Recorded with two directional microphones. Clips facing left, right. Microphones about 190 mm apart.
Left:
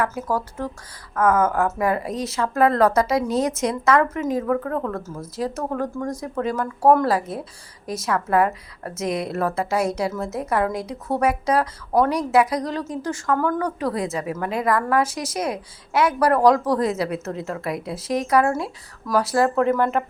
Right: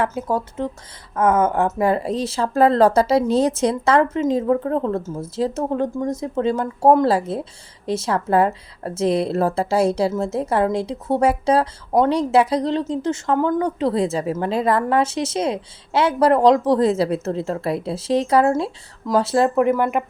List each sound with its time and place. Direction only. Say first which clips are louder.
0.0 s a woman's voice: right 2 dB; 25° right (ahead or behind)